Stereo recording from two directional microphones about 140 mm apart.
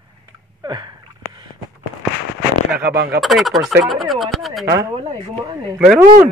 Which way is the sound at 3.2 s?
Centre (ahead or behind).